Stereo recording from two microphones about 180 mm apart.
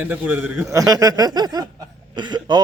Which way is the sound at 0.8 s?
20° right (ahead or behind).